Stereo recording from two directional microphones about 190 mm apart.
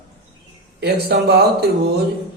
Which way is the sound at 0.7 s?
60° right (ahead or behind).